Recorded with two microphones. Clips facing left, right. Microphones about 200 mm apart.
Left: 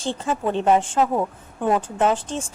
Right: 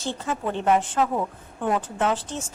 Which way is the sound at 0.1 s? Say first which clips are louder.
Left 4 dB; 25° left (ahead or behind).